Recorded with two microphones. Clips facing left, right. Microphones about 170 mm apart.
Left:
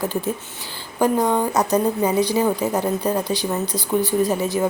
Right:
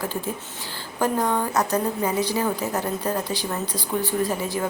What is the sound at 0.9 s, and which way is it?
A woman's voice, 15° left (ahead or behind).